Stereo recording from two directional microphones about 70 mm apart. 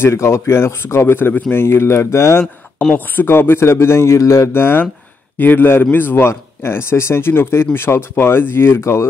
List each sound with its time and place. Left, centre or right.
0.0 s speech: left
4.5 s speech: left